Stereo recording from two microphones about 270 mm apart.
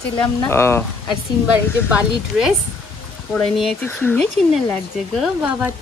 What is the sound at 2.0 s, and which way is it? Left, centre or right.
Speech, centre.